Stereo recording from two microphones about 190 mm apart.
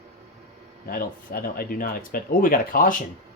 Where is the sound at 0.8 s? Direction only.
50° left (ahead or behind).